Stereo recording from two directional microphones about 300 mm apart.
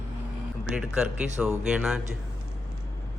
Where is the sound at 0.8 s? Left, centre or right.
Centre.